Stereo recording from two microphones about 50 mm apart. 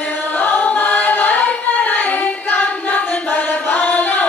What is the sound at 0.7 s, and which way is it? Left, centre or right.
Singing, left.